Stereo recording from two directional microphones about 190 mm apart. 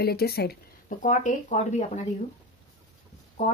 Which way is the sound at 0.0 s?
55° left (ahead or behind).